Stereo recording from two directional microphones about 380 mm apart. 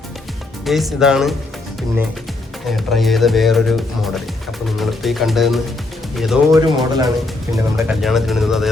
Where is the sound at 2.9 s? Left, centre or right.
Centre.